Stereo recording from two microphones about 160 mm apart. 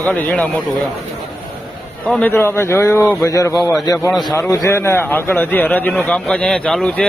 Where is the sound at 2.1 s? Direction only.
10° left (ahead or behind).